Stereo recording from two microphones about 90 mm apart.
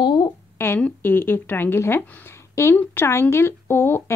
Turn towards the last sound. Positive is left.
turn(degrees=25)  # may be behind; listen again after turning